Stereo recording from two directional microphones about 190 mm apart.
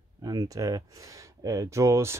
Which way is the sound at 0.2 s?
20° right (ahead or behind).